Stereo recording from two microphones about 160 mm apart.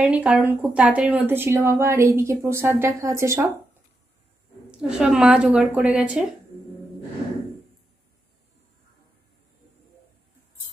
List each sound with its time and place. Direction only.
0.0 s speech: 10° right (ahead or behind)
4.6 s a woman's voice: 5° right (ahead or behind)